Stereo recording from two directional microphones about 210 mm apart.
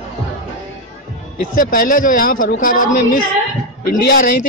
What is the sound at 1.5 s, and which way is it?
Speech, 40° left (ahead or behind).